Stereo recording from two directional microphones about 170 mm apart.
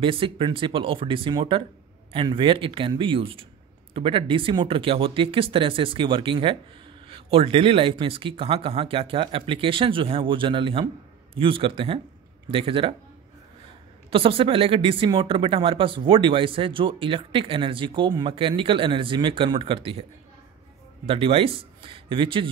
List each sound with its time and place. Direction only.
0.0 s speech: 30° right (ahead or behind)
14.1 s speech: 30° right (ahead or behind)